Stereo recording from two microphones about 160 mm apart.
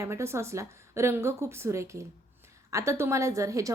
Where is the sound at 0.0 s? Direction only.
15° right (ahead or behind).